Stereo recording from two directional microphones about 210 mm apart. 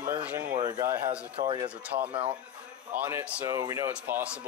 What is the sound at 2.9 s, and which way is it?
Speech, 10° right (ahead or behind).